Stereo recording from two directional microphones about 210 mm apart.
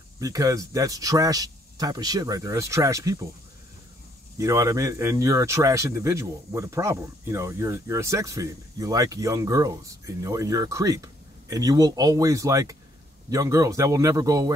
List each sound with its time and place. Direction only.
0.2 s speech: 15° right (ahead or behind)
4.4 s speech: 15° right (ahead or behind)